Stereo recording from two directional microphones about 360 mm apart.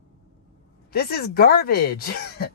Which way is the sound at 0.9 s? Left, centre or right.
Left.